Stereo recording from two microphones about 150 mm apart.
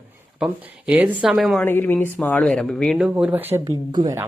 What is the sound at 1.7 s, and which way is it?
Speech, 15° left (ahead or behind).